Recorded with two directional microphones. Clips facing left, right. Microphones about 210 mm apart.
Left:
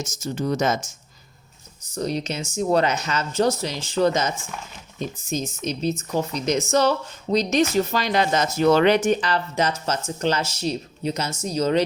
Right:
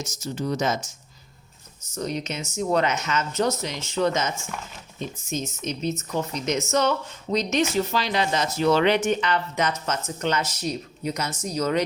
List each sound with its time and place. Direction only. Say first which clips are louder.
0.0 s speech: left 3 dB; 45° left (ahead or behind)
2.0 s speech: left 3 dB; 35° left (ahead or behind)
5.3 s speech: left 2 dB; 35° left (ahead or behind)